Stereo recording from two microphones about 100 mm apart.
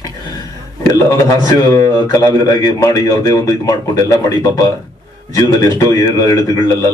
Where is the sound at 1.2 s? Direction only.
30° left (ahead or behind).